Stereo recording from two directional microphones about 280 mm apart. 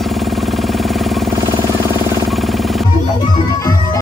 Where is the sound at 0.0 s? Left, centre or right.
Centre.